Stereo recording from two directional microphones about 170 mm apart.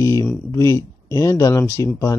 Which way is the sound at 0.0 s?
20° left (ahead or behind).